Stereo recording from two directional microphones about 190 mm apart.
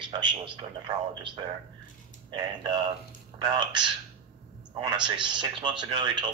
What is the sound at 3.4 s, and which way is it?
Speech, 25° right (ahead or behind).